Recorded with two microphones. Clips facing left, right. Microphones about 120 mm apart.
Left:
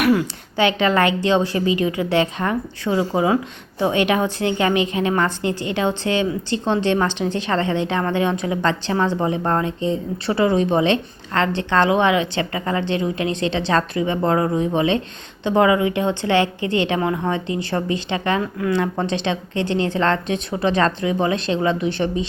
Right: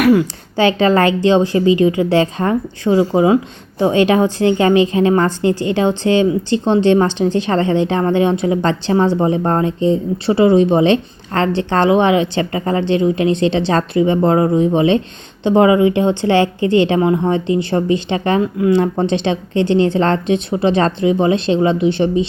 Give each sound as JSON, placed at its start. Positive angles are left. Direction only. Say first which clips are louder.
{"t": 0.5, "sound": "speech", "louder": "right 5 dB", "side_deg": -35}